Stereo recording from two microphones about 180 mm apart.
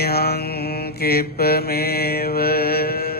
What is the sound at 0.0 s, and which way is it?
Mantra, 60° left (ahead or behind).